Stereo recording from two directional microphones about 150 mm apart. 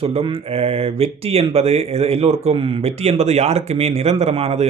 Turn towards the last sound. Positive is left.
turn(degrees=-45)  # may be behind; listen again after turning